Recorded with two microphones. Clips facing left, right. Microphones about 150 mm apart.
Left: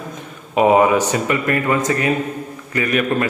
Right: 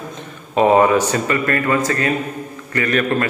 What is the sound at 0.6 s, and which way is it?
A man's voice, 10° left (ahead or behind).